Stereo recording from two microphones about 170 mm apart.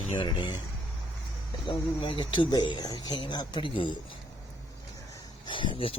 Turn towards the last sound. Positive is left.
turn(degrees=30)  # may be behind; listen again after turning